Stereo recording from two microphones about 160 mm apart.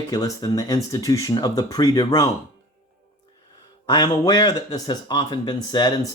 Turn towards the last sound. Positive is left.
turn(degrees=25)  # may be behind; listen again after turning